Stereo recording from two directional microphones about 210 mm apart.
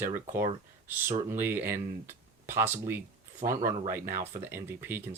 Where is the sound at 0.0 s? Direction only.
10° right (ahead or behind).